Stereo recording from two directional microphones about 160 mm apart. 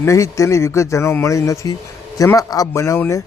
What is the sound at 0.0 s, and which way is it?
Speech, 20° left (ahead or behind).